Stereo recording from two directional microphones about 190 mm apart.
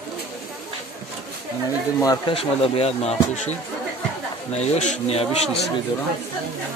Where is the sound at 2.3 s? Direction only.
30° left (ahead or behind).